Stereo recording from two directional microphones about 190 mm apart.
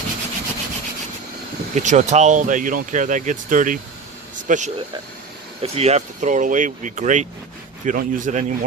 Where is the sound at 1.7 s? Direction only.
40° right (ahead or behind).